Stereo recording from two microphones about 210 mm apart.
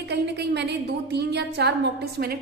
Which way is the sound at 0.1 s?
55° right (ahead or behind).